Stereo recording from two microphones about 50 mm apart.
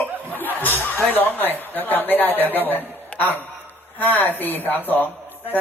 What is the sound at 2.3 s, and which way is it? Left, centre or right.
A man's voice, left.